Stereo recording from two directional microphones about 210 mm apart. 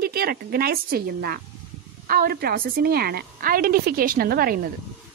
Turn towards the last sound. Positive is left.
turn(degrees=-45)  # may be behind; listen again after turning